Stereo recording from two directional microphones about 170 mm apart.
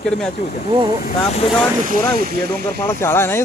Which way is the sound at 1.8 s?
60° right (ahead or behind).